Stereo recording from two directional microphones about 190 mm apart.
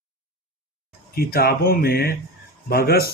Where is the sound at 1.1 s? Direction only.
55° left (ahead or behind).